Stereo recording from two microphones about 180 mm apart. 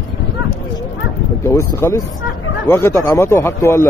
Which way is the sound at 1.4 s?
15° left (ahead or behind).